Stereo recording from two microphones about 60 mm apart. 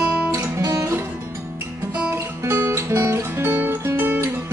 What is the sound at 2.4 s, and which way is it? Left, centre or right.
Music, right.